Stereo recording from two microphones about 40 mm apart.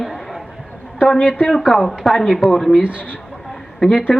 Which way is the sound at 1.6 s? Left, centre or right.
Centre.